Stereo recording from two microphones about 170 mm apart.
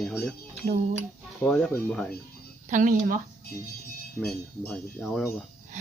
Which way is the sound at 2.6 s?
50° right (ahead or behind).